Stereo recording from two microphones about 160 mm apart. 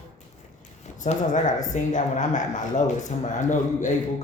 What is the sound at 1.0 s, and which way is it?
A man's voice, 50° left (ahead or behind).